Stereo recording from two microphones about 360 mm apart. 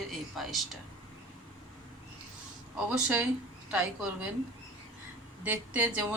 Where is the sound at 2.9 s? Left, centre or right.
Centre.